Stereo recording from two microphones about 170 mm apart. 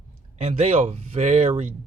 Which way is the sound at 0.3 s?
40° right (ahead or behind).